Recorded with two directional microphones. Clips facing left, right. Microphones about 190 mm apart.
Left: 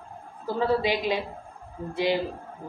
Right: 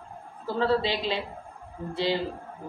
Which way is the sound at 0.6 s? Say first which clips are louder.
Left 1 dB; 15° left (ahead or behind).